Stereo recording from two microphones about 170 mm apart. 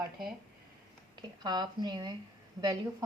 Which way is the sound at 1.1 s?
25° right (ahead or behind).